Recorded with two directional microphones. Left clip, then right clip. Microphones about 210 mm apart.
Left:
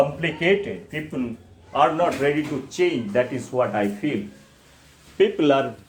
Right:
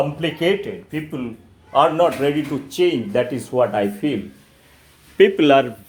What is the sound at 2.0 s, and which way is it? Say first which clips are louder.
Speech: right 3 dB; 40° right (ahead or behind).